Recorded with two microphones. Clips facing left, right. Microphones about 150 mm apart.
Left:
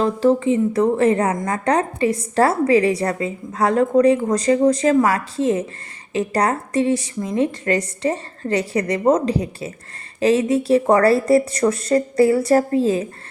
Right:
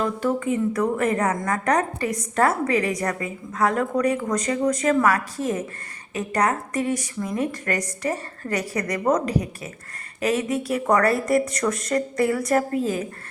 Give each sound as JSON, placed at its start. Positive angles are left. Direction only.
{"t": 0.0, "sound": "a woman's voice", "side_deg": 30}